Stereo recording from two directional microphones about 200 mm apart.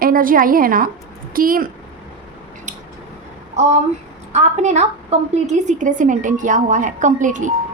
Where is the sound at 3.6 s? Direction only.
35° right (ahead or behind).